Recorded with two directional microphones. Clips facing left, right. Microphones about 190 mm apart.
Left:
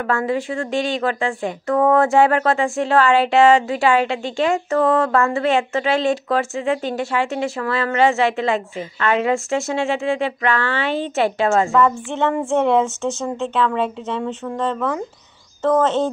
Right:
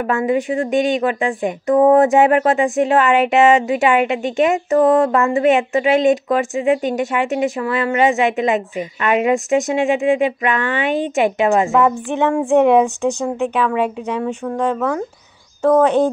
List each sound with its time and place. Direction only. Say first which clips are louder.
0.0 s speech: right 3 dB; 15° right (ahead or behind)